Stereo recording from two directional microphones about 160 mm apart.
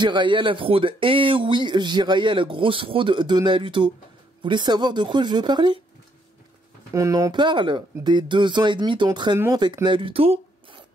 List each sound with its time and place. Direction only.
0.0 s speech: 30° right (ahead or behind)
6.9 s speech: 20° right (ahead or behind); by 10.8 s 35° right (ahead or behind)